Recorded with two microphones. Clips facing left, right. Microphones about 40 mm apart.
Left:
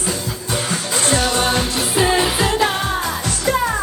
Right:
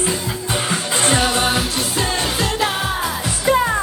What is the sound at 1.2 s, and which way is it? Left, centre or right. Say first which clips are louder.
Music: even; centre.